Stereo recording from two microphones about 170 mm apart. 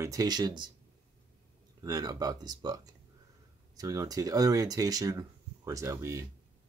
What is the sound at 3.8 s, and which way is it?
Speech, 20° right (ahead or behind).